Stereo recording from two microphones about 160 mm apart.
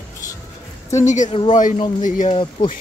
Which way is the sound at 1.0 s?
50° left (ahead or behind).